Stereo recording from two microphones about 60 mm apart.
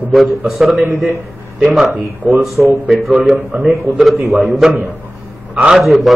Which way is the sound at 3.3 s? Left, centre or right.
Right.